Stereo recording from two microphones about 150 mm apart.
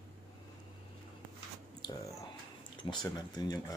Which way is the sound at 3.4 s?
25° left (ahead or behind).